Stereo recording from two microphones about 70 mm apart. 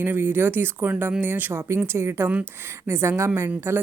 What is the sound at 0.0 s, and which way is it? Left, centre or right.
Speech, right.